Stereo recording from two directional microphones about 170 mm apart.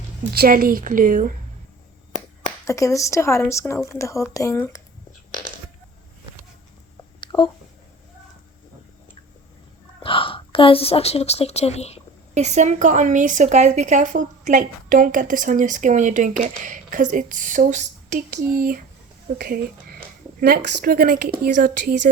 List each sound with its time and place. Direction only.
0.3 s a woman's voice: 60° right (ahead or behind)
2.6 s speech: 20° left (ahead or behind)
7.2 s a sound: 25° left (ahead or behind)
10.0 s a woman's voice: 30° left (ahead or behind)
12.3 s a woman's voice: 40° right (ahead or behind)